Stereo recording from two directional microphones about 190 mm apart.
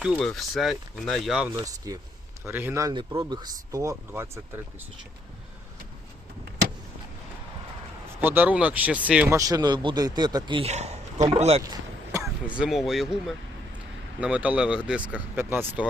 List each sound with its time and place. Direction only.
0.0 s speech: 5° right (ahead or behind)
1.5 s speech: 20° right (ahead or behind)
8.2 s speech: 10° right (ahead or behind)
9.4 s a man's voice: 20° right (ahead or behind)
12.5 s speech: centre (ahead or behind)